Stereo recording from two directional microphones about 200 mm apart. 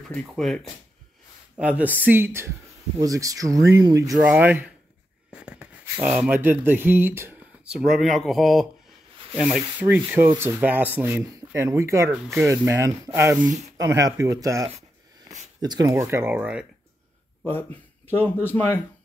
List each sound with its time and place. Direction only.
0.1 s speech: centre (ahead or behind)
1.6 s rub: 5° right (ahead or behind)
5.3 s speech: 5° right (ahead or behind)
9.4 s rub: 5° right (ahead or behind)
12.1 s speech: 5° right (ahead or behind)
12.4 s rub: 15° right (ahead or behind)
17.5 s speech: 10° left (ahead or behind)